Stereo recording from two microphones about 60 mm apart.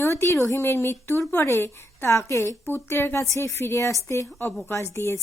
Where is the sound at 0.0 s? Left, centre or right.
Left.